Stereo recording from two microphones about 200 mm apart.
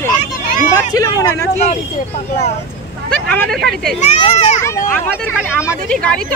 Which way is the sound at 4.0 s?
35° left (ahead or behind).